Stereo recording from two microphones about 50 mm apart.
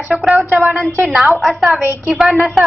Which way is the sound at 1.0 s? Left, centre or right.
Centre.